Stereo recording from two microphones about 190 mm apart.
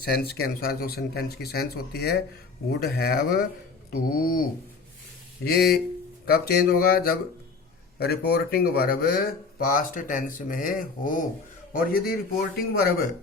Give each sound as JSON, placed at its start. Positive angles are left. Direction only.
{"t": 0.0, "sound": "speech", "side_deg": 55}
{"t": 5.5, "sound": "speech", "side_deg": 55}